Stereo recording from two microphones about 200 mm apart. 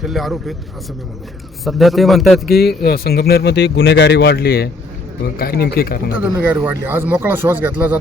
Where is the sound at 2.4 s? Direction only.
50° left (ahead or behind).